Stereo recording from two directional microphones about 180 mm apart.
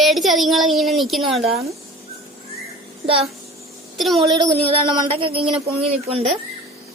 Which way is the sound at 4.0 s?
Centre (ahead or behind).